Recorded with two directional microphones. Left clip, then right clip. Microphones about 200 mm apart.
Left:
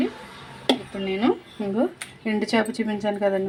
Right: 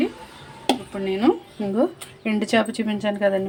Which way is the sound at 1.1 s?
5° right (ahead or behind).